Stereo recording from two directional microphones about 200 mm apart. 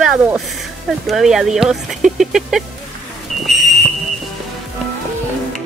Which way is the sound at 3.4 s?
Centre (ahead or behind).